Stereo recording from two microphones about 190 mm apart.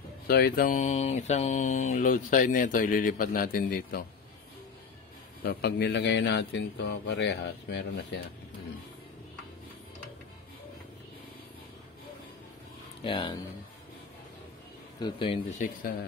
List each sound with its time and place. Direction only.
0.3 s mantra: 50° left (ahead or behind)
5.4 s speech: 60° left (ahead or behind)
13.0 s speech: 25° left (ahead or behind)
15.0 s speech: 25° left (ahead or behind)
15.6 s mantra: 45° left (ahead or behind)